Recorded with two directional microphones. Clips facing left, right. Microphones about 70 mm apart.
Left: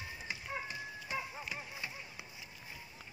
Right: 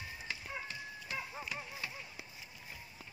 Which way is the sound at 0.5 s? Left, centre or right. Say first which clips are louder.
Left 2 dB; centre.